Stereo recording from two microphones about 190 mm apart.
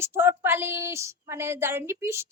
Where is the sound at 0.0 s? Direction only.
10° right (ahead or behind).